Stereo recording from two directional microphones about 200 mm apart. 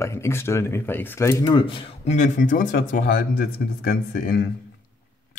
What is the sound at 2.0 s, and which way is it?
Speech, 35° left (ahead or behind).